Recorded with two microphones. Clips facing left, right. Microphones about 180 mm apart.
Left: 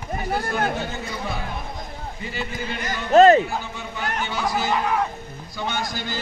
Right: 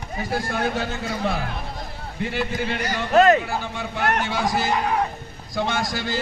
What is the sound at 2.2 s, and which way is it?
Speech, 70° right (ahead or behind).